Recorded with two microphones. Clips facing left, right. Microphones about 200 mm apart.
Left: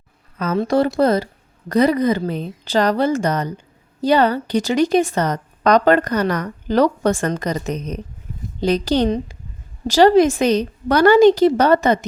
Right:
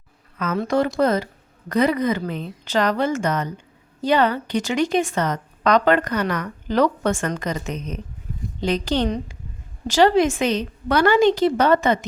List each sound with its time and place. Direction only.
0.3 s a woman's voice: 30° left (ahead or behind)